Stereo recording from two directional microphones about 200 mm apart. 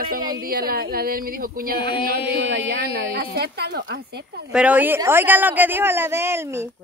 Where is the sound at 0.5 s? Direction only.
50° right (ahead or behind).